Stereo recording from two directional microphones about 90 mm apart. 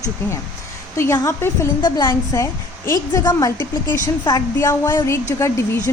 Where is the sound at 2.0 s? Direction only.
30° left (ahead or behind).